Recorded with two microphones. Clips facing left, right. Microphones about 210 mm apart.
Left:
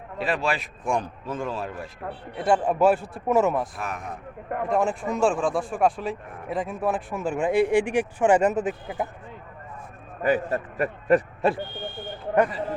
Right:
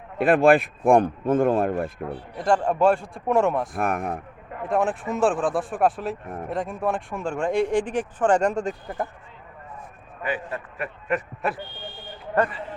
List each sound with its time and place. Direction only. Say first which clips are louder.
0.2 s speech: right 10 dB; 55° right (ahead or behind)
2.3 s speech: even; 5° left (ahead or behind)
3.8 s speech: right 8 dB; 55° right (ahead or behind)
4.7 s speech: right 1 dB; centre (ahead or behind)
6.2 s speech: right 6 dB; 45° right (ahead or behind)
6.5 s speech: even; centre (ahead or behind)
10.2 s a man's voice: left 6 dB; 40° left (ahead or behind)